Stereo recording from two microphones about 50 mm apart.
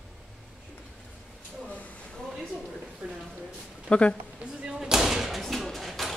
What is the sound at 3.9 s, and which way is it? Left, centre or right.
Speech, centre.